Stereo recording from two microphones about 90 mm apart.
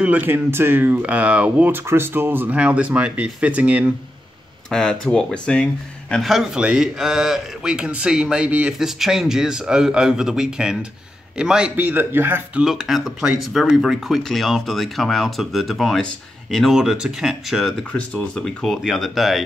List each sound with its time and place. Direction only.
0.0 s a man's voice: 20° right (ahead or behind)
1.9 s a man's voice: 25° right (ahead or behind)
4.6 s speech: 5° left (ahead or behind)
6.2 s a man's voice: 5° right (ahead or behind)
11.7 s speech: 20° right (ahead or behind)
12.6 s speech: 5° right (ahead or behind)